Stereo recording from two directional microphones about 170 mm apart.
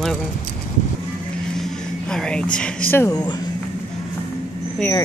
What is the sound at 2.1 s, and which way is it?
Speech, 5° left (ahead or behind).